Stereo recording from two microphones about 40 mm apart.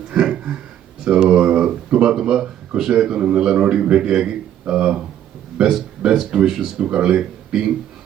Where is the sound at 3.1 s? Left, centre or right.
Right.